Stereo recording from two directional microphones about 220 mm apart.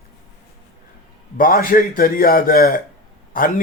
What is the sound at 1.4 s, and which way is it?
A man's voice, 40° left (ahead or behind).